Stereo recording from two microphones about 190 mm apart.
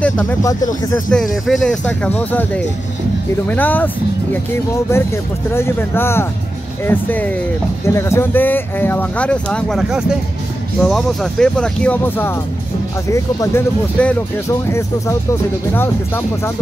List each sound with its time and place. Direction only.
0.0 s speech: 5° left (ahead or behind)
0.4 s speech: 20° left (ahead or behind)
1.1 s speech: centre (ahead or behind)